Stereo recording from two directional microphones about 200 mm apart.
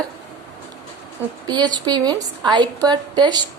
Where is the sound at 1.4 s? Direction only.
20° right (ahead or behind).